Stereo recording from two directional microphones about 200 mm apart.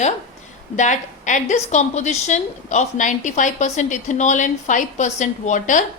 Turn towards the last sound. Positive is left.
turn(degrees=40)  # may be behind; listen again after turning